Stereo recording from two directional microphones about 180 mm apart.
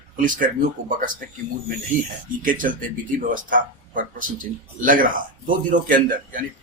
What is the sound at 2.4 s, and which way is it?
A man's voice, 50° right (ahead or behind).